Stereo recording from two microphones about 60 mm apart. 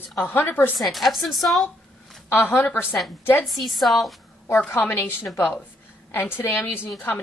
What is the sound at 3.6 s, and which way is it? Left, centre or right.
Speech, centre.